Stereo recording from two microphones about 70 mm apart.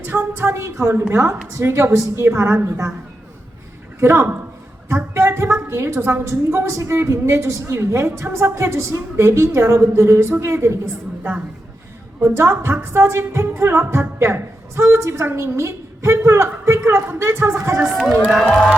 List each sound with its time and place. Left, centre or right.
0.0 s a woman's voice: right
4.0 s a woman's voice: right
12.2 s a woman's voice: right
17.7 s speech: centre